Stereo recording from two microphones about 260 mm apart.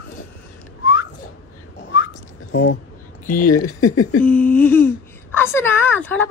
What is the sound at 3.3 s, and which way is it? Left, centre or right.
Speech, left.